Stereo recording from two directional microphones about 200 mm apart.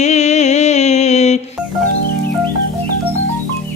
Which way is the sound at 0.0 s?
35° left (ahead or behind).